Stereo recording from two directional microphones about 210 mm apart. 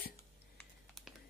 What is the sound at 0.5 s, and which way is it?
Typing, centre (ahead or behind).